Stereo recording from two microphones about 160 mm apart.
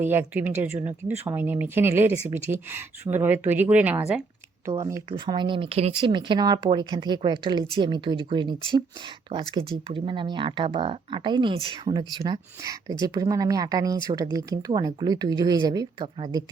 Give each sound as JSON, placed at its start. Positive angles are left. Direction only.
{"t": 0.0, "sound": "speech", "side_deg": -15}